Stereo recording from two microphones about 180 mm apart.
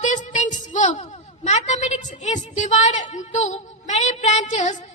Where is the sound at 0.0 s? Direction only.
45° left (ahead or behind).